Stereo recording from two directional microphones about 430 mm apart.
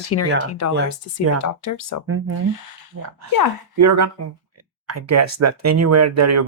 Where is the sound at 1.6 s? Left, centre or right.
Left.